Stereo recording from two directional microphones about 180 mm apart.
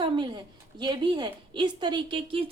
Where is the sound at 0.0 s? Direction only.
25° right (ahead or behind).